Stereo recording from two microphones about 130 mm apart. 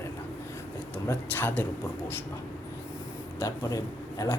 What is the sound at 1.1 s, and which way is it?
Speech, 15° left (ahead or behind).